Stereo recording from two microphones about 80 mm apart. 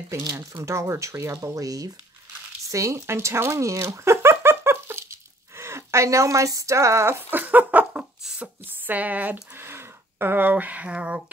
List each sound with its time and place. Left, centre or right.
0.1 s speech: right
2.7 s a sound: right
5.6 s speech: right; by 11.2 s centre